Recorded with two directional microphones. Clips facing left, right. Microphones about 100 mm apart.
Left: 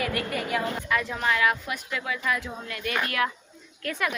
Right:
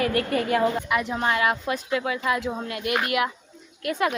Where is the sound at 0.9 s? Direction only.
20° right (ahead or behind).